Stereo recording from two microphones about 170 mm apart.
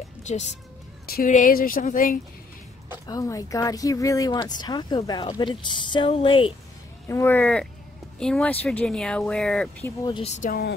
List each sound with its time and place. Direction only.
0.3 s speech: 45° left (ahead or behind)
1.0 s speech: 55° left (ahead or behind)
3.1 s speech: 20° left (ahead or behind)
7.1 s speech: 15° left (ahead or behind)
9.8 s speech: 20° left (ahead or behind)
10.2 s speech: 40° left (ahead or behind)